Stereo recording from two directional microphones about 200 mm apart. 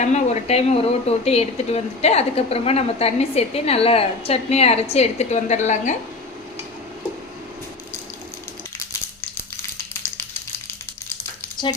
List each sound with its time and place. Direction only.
0.0 s speech: 35° left (ahead or behind)